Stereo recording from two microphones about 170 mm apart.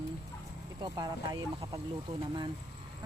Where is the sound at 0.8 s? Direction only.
25° right (ahead or behind).